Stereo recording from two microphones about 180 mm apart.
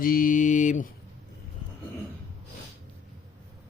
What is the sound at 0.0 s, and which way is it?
Mantra, 50° left (ahead or behind).